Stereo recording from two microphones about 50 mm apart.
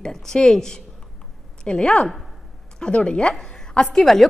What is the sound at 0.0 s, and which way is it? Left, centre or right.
A woman's voice, centre.